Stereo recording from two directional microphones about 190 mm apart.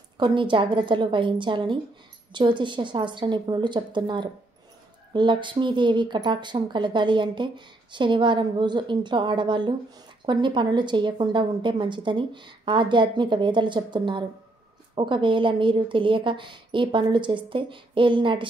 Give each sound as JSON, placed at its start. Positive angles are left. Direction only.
{"t": 0.2, "sound": "speech", "side_deg": -25}